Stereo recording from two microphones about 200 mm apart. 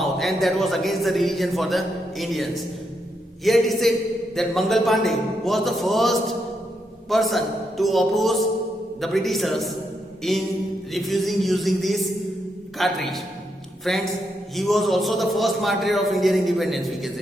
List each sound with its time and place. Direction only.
0.0 s a man's voice: centre (ahead or behind)